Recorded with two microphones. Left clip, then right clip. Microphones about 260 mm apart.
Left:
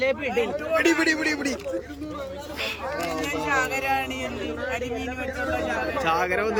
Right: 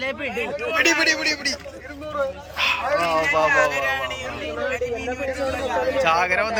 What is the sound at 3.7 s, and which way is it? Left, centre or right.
Speech, left.